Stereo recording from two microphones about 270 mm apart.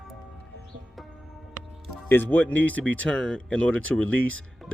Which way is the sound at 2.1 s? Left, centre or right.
Centre.